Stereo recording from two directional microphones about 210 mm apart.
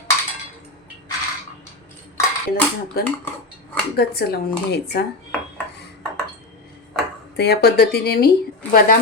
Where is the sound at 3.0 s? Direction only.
45° left (ahead or behind).